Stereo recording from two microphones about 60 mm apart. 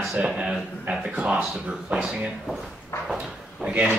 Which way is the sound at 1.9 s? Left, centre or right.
Centre.